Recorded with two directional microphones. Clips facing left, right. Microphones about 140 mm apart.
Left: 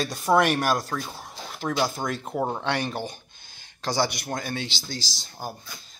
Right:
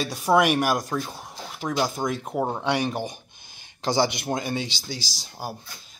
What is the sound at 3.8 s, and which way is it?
Speech, 20° right (ahead or behind).